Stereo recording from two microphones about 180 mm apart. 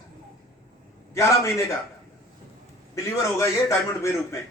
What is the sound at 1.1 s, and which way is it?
Speech, 15° left (ahead or behind).